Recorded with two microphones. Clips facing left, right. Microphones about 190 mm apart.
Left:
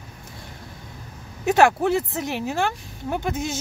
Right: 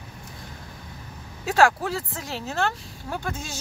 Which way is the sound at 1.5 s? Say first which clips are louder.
Left 3 dB; 20° left (ahead or behind).